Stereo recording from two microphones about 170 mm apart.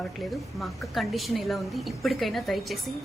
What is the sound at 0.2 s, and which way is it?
A woman's voice, centre (ahead or behind).